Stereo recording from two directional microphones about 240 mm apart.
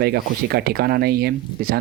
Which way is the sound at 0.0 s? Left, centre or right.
Right.